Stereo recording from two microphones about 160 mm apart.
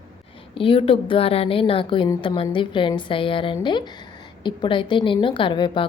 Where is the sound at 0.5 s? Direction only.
35° left (ahead or behind).